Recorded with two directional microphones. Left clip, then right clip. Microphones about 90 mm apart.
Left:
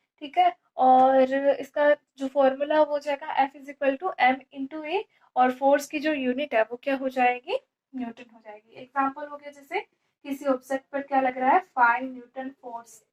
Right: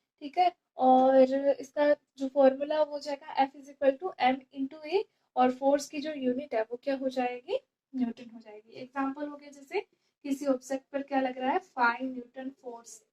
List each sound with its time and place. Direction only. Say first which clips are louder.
0.3 s speech: left 5 dB; 25° left (ahead or behind)
6.3 s a woman's voice: left 7 dB; 45° left (ahead or behind); by 8.5 s 25° left (ahead or behind)
10.4 s speech: left 5 dB; 50° left (ahead or behind)
10.9 s speech: left 6 dB; 30° left (ahead or behind)